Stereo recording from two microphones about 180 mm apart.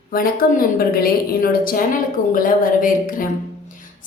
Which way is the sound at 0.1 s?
50° left (ahead or behind).